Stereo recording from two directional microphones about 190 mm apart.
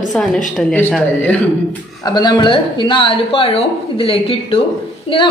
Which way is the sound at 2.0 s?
25° left (ahead or behind).